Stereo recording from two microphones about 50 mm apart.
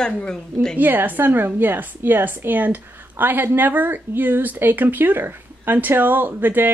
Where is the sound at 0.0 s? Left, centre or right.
Centre.